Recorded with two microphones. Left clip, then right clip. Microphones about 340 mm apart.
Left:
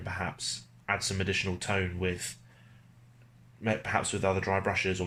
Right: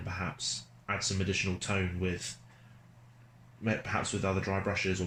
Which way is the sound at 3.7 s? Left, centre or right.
Left.